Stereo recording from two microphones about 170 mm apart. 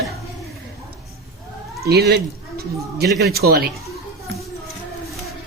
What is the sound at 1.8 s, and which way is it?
A man's voice, 70° right (ahead or behind).